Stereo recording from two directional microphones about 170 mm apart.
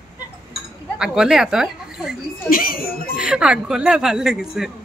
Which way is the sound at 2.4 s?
60° left (ahead or behind).